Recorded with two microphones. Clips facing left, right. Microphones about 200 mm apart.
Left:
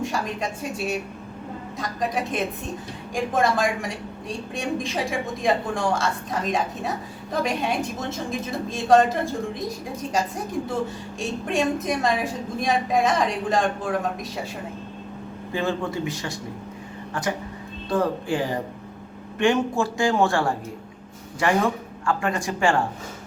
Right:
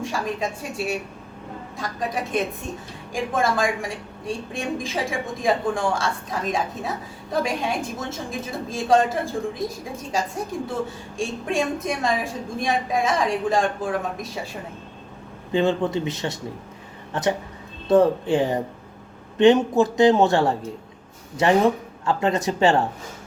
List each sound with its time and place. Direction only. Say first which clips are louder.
0.0 s a woman's voice: right 1 dB; centre (ahead or behind)
11.4 s a woman's voice: left 2 dB; centre (ahead or behind)
15.5 s speech: right 5 dB; 20° right (ahead or behind)